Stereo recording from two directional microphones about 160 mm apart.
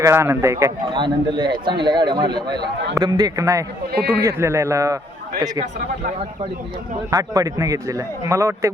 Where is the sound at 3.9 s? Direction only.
80° right.